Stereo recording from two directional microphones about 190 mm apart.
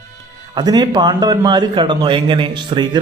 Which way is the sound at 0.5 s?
20° right (ahead or behind).